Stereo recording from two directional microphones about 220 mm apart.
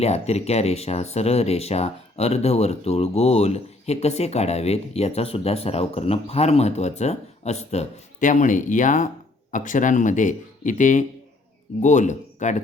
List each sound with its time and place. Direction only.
0.0 s speech: 30° left (ahead or behind)